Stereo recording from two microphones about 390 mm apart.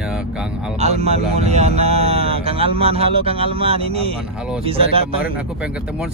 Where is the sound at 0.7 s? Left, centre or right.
Centre.